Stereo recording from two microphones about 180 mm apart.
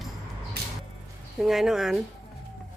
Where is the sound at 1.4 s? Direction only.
Centre (ahead or behind).